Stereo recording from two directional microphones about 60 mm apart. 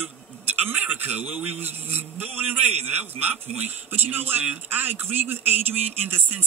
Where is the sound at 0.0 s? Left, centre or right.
Right.